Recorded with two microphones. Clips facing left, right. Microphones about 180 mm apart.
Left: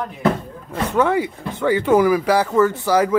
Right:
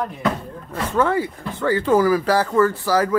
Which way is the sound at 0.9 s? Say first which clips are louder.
Left 1 dB; 15° left (ahead or behind).